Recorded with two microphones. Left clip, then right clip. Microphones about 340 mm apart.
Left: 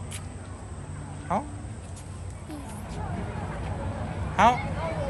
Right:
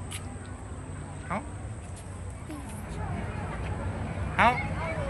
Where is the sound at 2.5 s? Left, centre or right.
Centre.